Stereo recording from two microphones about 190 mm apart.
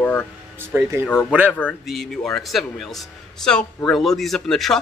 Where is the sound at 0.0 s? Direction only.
10° left (ahead or behind).